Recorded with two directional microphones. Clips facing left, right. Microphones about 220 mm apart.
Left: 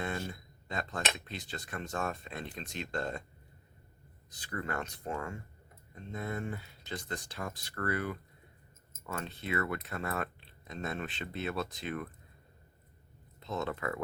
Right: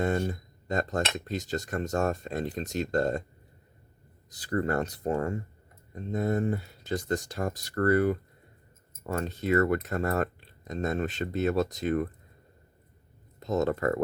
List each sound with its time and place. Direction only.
0.0 s speech: 45° right (ahead or behind)
4.3 s speech: 40° right (ahead or behind)
13.4 s speech: 45° right (ahead or behind)